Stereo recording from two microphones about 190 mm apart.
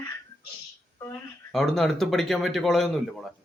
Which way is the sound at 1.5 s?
Centre (ahead or behind).